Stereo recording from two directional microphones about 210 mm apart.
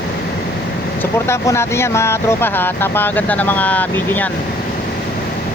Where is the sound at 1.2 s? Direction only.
10° left (ahead or behind).